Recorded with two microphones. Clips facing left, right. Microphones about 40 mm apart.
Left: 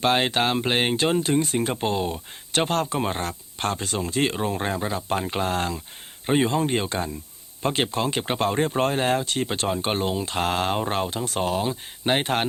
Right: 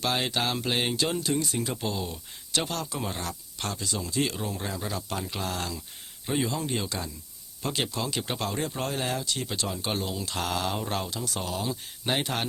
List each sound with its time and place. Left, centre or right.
0.0 s speech: left